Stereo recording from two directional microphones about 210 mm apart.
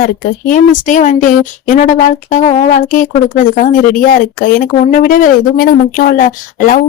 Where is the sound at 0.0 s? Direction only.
40° left (ahead or behind).